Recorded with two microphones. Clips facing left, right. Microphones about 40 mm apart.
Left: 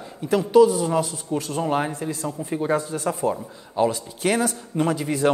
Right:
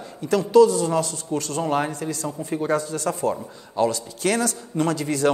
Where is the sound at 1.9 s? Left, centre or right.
Centre.